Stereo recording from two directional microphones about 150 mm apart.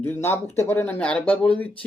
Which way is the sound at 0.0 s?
15° left (ahead or behind).